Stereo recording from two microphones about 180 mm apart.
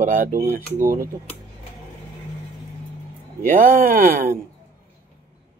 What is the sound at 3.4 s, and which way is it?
Speech, 50° right (ahead or behind).